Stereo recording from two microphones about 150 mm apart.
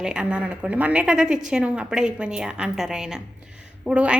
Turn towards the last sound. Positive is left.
turn(degrees=-5)  # may be behind; listen again after turning